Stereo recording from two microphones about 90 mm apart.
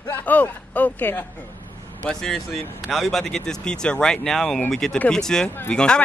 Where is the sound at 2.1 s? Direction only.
5° left (ahead or behind).